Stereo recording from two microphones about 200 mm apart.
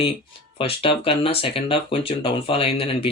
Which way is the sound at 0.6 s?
30° left (ahead or behind).